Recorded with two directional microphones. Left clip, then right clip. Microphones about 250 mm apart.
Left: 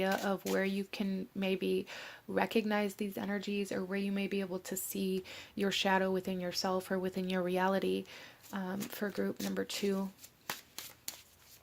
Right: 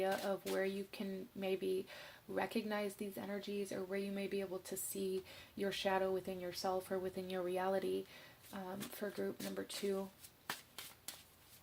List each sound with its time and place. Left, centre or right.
0.0 s speech: left